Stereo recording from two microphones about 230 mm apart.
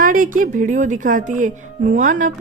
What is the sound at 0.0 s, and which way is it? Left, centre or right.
A woman's voice, right.